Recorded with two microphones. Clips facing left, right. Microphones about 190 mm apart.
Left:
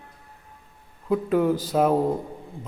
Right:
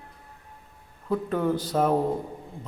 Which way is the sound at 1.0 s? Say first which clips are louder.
Left 4 dB; 10° left (ahead or behind).